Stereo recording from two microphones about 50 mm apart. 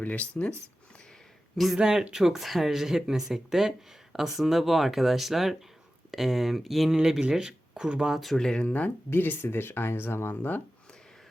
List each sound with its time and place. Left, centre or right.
0.0 s speech: left
1.5 s speech: centre
1.8 s speech: centre
7.0 s speech: centre
8.1 s speech: centre
8.6 s speech: left
9.0 s speech: left